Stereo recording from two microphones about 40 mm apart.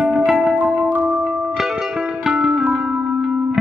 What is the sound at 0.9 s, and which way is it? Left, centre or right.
Music, right.